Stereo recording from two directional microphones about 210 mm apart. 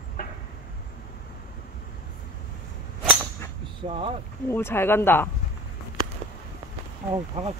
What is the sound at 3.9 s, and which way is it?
Speech, 25° right (ahead or behind).